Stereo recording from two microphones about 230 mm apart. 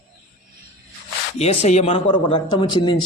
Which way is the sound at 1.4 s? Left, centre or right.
Left.